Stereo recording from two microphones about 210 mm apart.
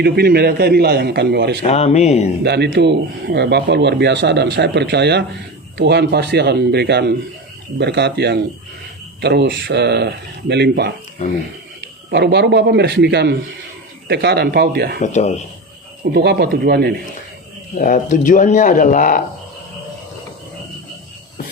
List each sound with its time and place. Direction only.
0.0 s speech: 50° right (ahead or behind)
1.6 s speech: 30° left (ahead or behind)
2.4 s speech: 50° right (ahead or behind)
12.1 s speech: 50° right (ahead or behind)
15.0 s speech: 35° left (ahead or behind)
16.0 s speech: 50° right (ahead or behind)
17.7 s speech: 40° left (ahead or behind)